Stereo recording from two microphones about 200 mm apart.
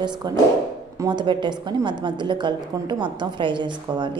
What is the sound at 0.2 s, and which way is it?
A woman's voice, 20° right (ahead or behind).